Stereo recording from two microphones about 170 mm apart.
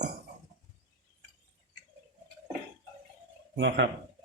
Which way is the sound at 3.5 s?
90° right.